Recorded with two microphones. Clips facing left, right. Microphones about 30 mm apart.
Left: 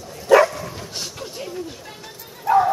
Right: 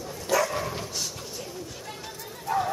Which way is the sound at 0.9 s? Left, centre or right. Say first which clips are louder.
Left 3 dB; left.